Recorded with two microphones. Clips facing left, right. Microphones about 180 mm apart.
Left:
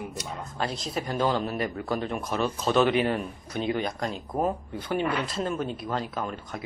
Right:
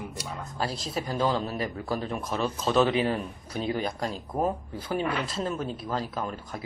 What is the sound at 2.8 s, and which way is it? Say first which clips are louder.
Speech: left 1 dB; 30° right (ahead or behind).